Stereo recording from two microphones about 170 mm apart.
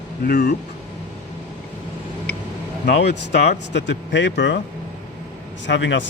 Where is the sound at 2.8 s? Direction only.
80° left.